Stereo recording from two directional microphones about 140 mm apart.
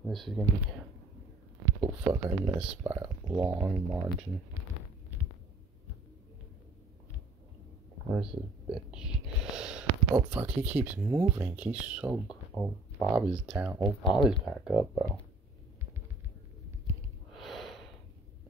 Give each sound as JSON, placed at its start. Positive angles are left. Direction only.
{"t": 0.0, "sound": "speech", "side_deg": 0}
{"t": 1.8, "sound": "speech", "side_deg": -20}
{"t": 8.1, "sound": "speech", "side_deg": -5}
{"t": 17.3, "sound": "gasp", "side_deg": 0}